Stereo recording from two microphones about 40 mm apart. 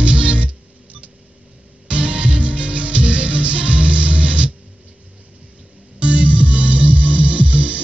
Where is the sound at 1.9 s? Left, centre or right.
Right.